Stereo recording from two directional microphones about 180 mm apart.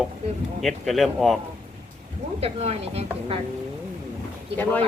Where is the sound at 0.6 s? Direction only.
Centre (ahead or behind).